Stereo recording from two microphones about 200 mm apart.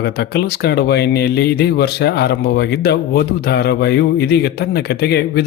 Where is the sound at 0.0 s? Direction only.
55° left (ahead or behind).